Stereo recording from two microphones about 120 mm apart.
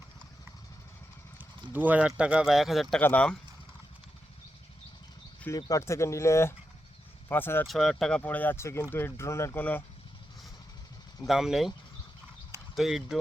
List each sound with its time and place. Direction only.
1.7 s speech: 15° right (ahead or behind)
3.0 s speech: 15° left (ahead or behind)
5.5 s speech: 30° left (ahead or behind)
7.7 s speech: centre (ahead or behind)
11.3 s speech: 5° right (ahead or behind)
12.7 s speech: 5° right (ahead or behind)